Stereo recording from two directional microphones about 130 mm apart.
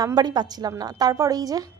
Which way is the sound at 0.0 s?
30° right (ahead or behind).